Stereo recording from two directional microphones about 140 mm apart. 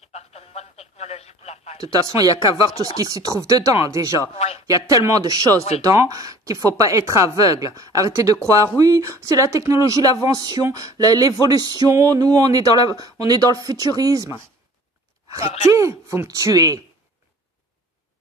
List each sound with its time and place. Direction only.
0.1 s radio: 50° left (ahead or behind)
1.8 s speech: 25° right (ahead or behind)
2.3 s speech: 35° left (ahead or behind)
3.0 s speech: 25° right (ahead or behind)
4.3 s speech: 45° left (ahead or behind)
4.6 s speech: 25° right (ahead or behind)
15.4 s speech: 50° left (ahead or behind)
15.7 s speech: 20° right (ahead or behind)